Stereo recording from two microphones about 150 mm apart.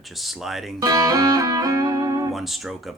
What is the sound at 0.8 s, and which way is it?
Music, 25° right (ahead or behind).